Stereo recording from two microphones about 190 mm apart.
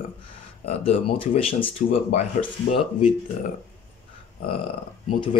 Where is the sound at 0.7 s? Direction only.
30° left (ahead or behind).